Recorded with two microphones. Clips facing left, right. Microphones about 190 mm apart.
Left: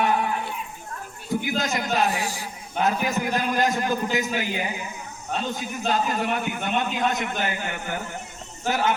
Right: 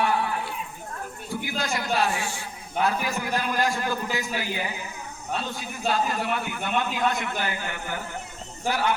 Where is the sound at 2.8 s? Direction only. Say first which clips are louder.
Left 2 dB; 20° left (ahead or behind).